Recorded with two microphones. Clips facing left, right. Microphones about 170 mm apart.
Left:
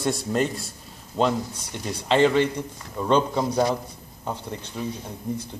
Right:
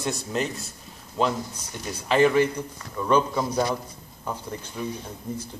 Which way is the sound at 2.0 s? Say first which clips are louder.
Even; 25° left (ahead or behind).